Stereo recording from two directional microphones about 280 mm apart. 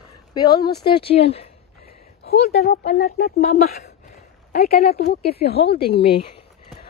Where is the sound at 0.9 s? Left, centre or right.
Centre.